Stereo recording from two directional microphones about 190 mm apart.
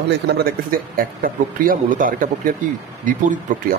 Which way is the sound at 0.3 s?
55° right (ahead or behind).